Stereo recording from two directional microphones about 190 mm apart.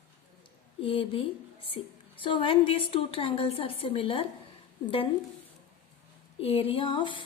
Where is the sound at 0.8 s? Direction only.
25° left (ahead or behind).